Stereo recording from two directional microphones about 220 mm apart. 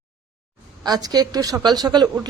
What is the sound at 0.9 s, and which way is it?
Speech, 15° right (ahead or behind).